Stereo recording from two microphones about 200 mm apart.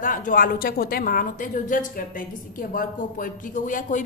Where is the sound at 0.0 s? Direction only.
40° left (ahead or behind).